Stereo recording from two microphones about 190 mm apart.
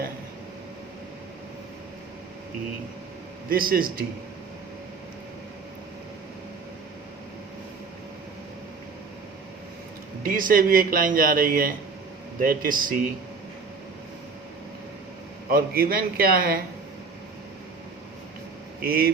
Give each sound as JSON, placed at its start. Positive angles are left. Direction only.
{"t": 3.5, "sound": "speech", "side_deg": -50}
{"t": 10.2, "sound": "speech", "side_deg": -45}
{"t": 15.4, "sound": "speech", "side_deg": -50}
{"t": 18.8, "sound": "speech", "side_deg": -50}